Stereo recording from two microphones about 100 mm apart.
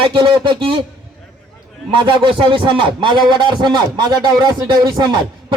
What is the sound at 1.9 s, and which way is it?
A man's voice, 60° right (ahead or behind).